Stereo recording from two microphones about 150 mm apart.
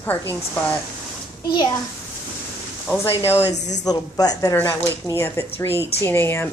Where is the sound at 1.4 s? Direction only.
30° left (ahead or behind).